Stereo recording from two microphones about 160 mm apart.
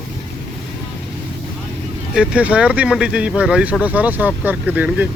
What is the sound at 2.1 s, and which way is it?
Speech, 5° right (ahead or behind).